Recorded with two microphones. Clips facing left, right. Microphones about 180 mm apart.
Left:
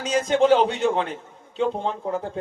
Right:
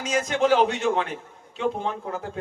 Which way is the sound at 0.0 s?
30° left (ahead or behind).